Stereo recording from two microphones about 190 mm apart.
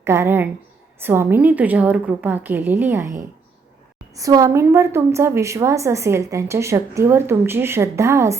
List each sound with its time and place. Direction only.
0.0 s a woman's voice: 15° right (ahead or behind)
4.1 s a woman's voice: 20° right (ahead or behind)